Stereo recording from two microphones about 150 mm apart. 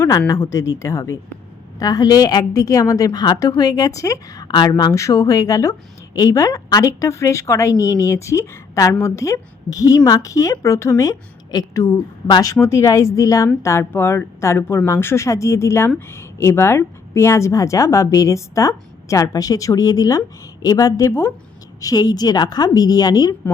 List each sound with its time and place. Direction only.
0.0 s a woman's voice: 20° left (ahead or behind)